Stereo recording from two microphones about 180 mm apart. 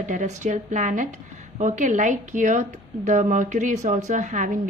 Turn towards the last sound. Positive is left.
turn(degrees=-45)  # may be behind; listen again after turning